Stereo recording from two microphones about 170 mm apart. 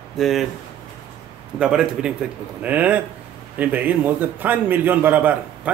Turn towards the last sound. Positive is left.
turn(degrees=-10)  # may be behind; listen again after turning